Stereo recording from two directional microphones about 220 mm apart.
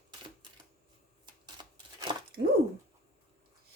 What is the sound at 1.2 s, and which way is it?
Camera, 20° right (ahead or behind).